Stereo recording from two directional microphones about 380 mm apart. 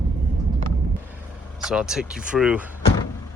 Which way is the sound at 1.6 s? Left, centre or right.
Centre.